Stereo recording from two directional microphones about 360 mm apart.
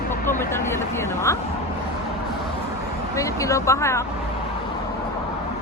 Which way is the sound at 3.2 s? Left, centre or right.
Centre.